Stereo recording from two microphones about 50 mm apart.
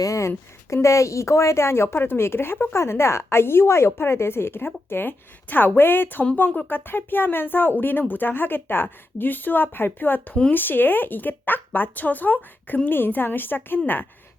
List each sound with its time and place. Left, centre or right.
0.1 s a woman's voice: left
2.7 s speech: left